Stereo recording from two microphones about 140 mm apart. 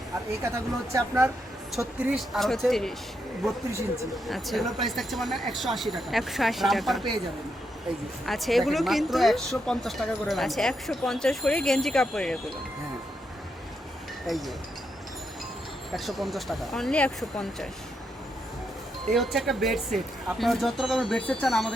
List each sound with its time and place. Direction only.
0.4 s speech: 20° right (ahead or behind)
2.1 s speech: centre (ahead or behind)
4.3 s speech: centre (ahead or behind)
8.3 s speech: centre (ahead or behind)
14.3 s speech: centre (ahead or behind)
16.0 s speech: centre (ahead or behind)
19.1 s speech: centre (ahead or behind)